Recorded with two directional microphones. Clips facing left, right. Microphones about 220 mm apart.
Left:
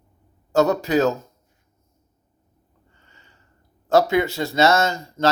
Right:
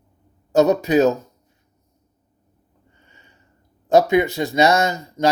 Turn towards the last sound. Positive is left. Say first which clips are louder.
# right 1 dB
turn(degrees=-15)  # may be behind; listen again after turning